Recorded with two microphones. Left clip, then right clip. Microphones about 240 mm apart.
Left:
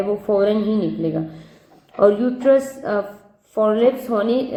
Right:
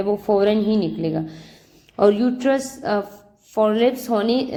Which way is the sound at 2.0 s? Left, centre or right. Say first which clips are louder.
Left 1 dB; right.